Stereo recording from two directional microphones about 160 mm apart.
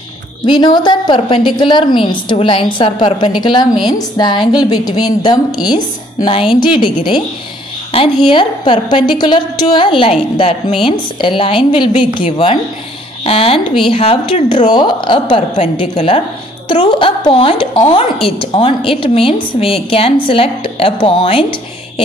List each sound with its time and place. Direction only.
0.5 s a woman's voice: 30° left (ahead or behind)
6.4 s a woman's voice: 5° right (ahead or behind)
7.9 s a woman's voice: 35° left (ahead or behind)
15.5 s a woman's voice: 40° left (ahead or behind)